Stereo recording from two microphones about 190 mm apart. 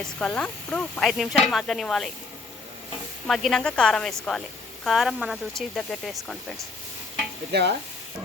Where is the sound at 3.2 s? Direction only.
Centre (ahead or behind).